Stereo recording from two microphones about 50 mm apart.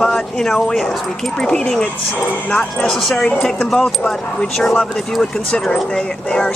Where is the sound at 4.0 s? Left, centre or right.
Left.